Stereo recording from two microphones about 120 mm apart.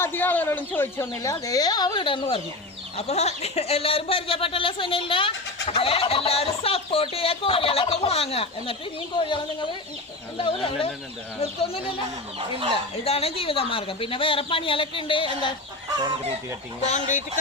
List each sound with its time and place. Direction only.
0.0 s speech: 15° left (ahead or behind); by 2.2 s 40° left (ahead or behind)
3.0 s speech: 65° left (ahead or behind)
9.1 s speech: 40° left (ahead or behind)
13.1 s speech: 55° left (ahead or behind)
16.8 s speech: 80° left